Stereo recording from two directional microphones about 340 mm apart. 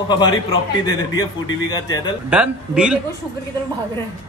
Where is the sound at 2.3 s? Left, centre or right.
Centre.